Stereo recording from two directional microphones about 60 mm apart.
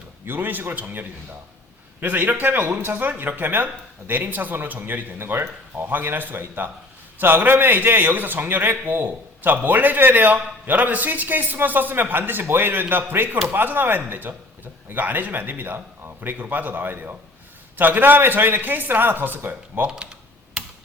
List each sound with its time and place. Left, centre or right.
0.3 s a man's voice: right
19.9 s speech: centre